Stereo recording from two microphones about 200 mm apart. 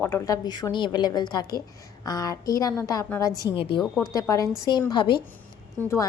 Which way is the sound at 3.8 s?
Centre (ahead or behind).